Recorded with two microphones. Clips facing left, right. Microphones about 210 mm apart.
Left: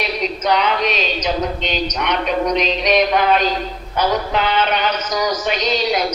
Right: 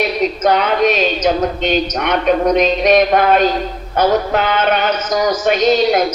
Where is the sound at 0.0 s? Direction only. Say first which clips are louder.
Right 6 dB; 50° right (ahead or behind).